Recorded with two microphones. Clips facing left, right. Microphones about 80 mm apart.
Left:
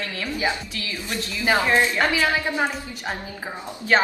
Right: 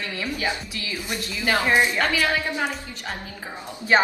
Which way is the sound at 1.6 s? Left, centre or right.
Centre.